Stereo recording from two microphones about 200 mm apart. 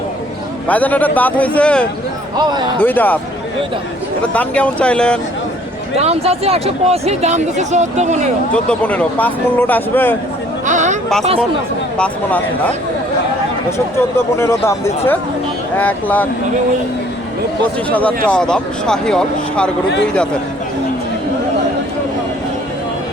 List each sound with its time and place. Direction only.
0.7 s speech: 10° left (ahead or behind)
2.4 s speech: 20° right (ahead or behind)
2.8 s speech: 10° left (ahead or behind)
4.4 s speech: 5° left (ahead or behind)
6.0 s speech: 30° right (ahead or behind)
8.5 s speech: 5° left (ahead or behind)
10.7 s a sound: 35° right (ahead or behind)
11.9 s speech: 5° left (ahead or behind)
17.9 s speech: 5° left (ahead or behind)